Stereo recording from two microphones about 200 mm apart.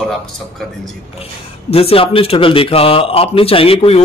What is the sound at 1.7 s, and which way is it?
Speech, 30° left (ahead or behind).